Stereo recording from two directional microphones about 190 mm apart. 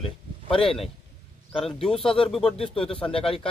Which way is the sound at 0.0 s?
30° left (ahead or behind).